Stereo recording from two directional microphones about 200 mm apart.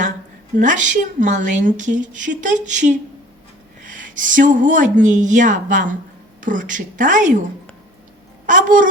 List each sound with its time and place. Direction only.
0.5 s a woman's voice: 40° right (ahead or behind)
8.4 s a woman's voice: 40° right (ahead or behind)